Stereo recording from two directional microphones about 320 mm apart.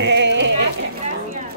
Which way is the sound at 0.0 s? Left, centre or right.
Right.